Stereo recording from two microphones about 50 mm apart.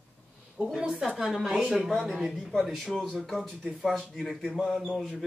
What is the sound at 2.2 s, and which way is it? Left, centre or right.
Speech, centre.